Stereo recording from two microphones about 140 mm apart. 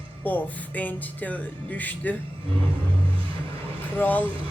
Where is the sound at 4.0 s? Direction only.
10° left (ahead or behind).